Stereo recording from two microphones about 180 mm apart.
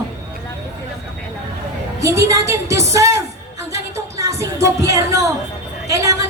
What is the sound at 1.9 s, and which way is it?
A woman's voice, 15° right (ahead or behind).